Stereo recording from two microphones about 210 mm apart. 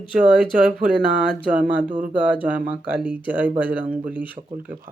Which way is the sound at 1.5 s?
5° right (ahead or behind).